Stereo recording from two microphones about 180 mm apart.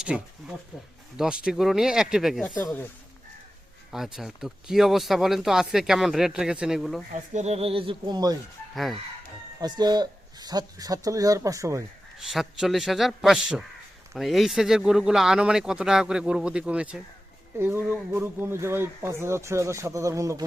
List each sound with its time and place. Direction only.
0.0 s a sound: 5° right (ahead or behind)
1.1 s speech: 5° right (ahead or behind)
2.6 s speech: 10° left (ahead or behind)
3.9 s speech: centre (ahead or behind)
7.1 s speech: 40° right (ahead or behind); by 8.4 s 20° right (ahead or behind)
8.7 s speech: centre (ahead or behind)
9.6 s speech: 25° right (ahead or behind)
12.1 s speech: centre (ahead or behind); by 20.4 s 15° right (ahead or behind)